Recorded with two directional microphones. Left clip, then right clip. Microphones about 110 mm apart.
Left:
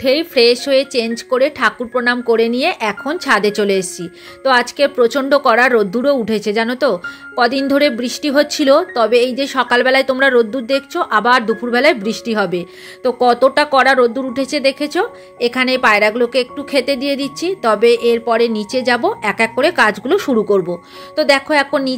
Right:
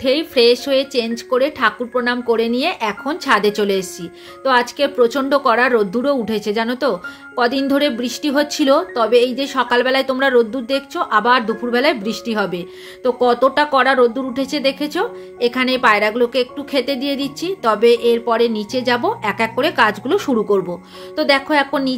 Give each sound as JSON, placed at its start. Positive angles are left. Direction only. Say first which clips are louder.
{"t": 0.0, "sound": "speech", "louder": "left 2 dB", "side_deg": 45}